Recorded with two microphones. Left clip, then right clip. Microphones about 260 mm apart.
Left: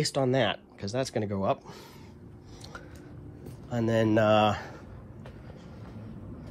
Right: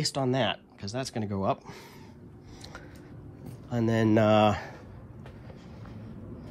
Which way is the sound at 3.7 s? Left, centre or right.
Right.